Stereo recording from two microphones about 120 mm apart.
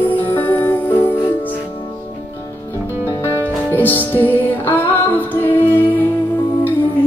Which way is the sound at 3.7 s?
15° left (ahead or behind).